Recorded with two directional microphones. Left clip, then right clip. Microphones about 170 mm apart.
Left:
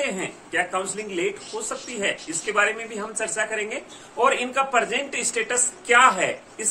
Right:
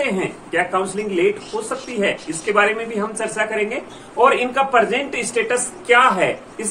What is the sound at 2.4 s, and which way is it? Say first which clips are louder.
Speech: right 5 dB; 20° left (ahead or behind).